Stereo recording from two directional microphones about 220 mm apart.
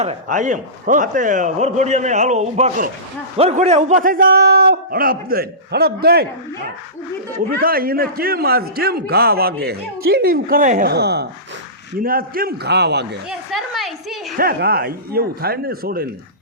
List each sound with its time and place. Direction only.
0.0 s a man's voice: 35° right (ahead or behind)
7.6 s a man's voice: 40° right (ahead or behind)
13.5 s a woman's voice: centre (ahead or behind)
14.3 s a man's voice: 45° right (ahead or behind)